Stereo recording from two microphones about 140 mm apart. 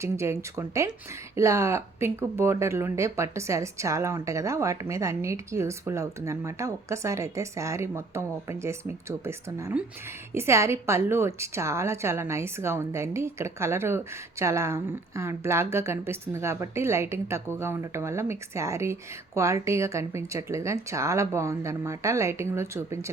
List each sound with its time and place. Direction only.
0.0 s a woman's voice: 20° right (ahead or behind)